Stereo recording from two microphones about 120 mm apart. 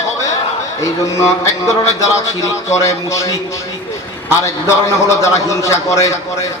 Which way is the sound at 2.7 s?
25° left (ahead or behind).